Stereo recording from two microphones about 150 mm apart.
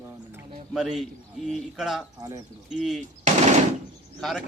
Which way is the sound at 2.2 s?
25° right (ahead or behind).